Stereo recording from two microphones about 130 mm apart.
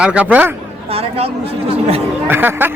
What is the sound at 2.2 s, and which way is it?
Speech, 15° right (ahead or behind).